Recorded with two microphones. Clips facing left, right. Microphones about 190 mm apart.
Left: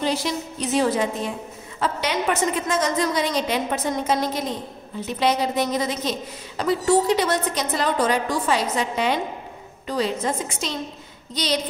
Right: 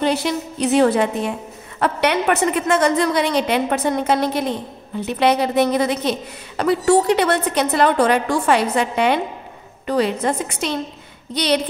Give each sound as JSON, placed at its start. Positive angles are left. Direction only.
{"t": 0.0, "sound": "a woman's voice", "side_deg": -60}